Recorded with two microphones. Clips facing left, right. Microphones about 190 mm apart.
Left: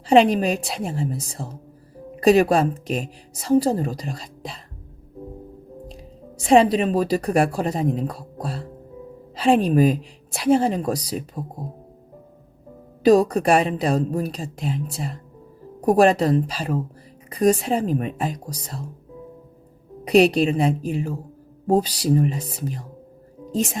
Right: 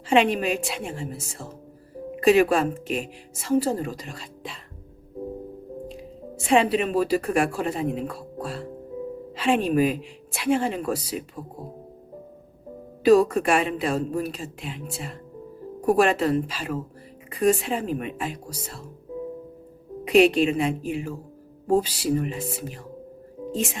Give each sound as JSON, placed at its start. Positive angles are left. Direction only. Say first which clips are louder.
{"t": 0.1, "sound": "speech", "louder": "left 5 dB", "side_deg": 35}
{"t": 6.4, "sound": "speech", "louder": "left 5 dB", "side_deg": 35}
{"t": 13.0, "sound": "speech", "louder": "left 1 dB", "side_deg": 35}
{"t": 20.1, "sound": "speech", "louder": "left 1 dB", "side_deg": 40}